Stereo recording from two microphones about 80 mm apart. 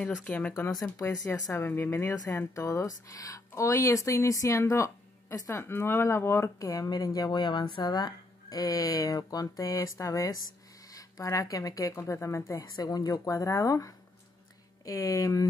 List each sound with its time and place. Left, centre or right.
0.0 s speech: centre
0.9 s speech: left
1.5 s speech: left
7.2 s speech: left
12.0 s speech: left
12.5 s speech: left